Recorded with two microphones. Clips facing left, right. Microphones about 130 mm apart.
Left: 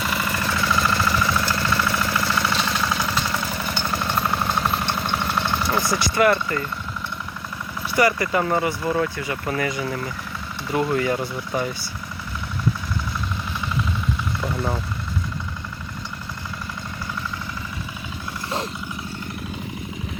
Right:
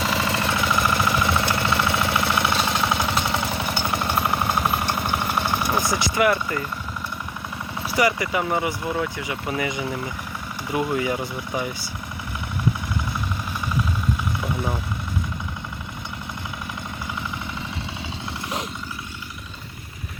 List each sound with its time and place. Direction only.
0.0 s engine: 30° right (ahead or behind); by 6.7 s 10° right (ahead or behind)
7.9 s speech: 15° right (ahead or behind)
14.4 s speech: 15° right (ahead or behind)